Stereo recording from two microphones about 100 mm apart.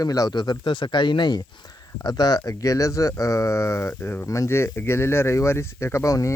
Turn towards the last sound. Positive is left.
turn(degrees=30)  # may be behind; listen again after turning